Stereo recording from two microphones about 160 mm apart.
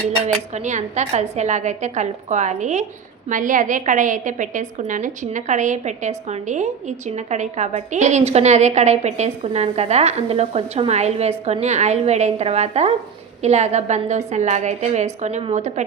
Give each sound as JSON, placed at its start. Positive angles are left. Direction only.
{"t": 0.5, "sound": "a woman's voice", "side_deg": -50}